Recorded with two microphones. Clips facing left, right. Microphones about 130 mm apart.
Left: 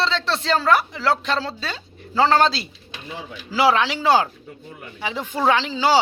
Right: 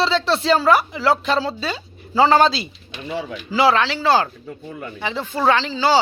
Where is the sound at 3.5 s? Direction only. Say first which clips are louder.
Right 1 dB; 10° left (ahead or behind).